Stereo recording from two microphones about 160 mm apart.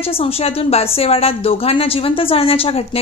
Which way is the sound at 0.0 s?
35° left (ahead or behind).